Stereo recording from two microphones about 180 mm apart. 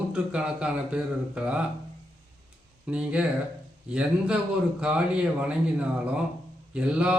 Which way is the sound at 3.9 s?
5° right (ahead or behind).